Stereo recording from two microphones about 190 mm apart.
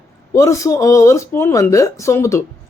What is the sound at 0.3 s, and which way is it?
Speech, 15° left (ahead or behind).